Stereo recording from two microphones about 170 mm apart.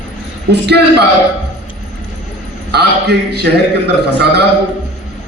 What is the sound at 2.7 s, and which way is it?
A man's voice, 75° right (ahead or behind).